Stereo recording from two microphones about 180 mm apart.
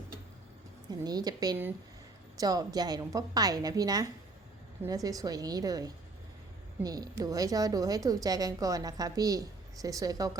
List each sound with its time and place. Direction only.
0.9 s a woman's voice: 20° right (ahead or behind)